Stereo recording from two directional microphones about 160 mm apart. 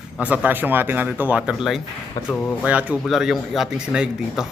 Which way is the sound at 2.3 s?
10° left (ahead or behind).